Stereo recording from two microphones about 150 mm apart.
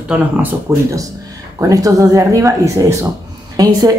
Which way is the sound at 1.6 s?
25° right (ahead or behind).